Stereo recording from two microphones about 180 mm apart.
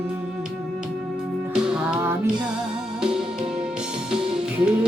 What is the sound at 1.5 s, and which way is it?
Music, 5° right (ahead or behind).